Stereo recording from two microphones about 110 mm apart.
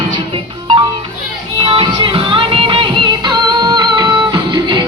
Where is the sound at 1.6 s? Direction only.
50° right (ahead or behind).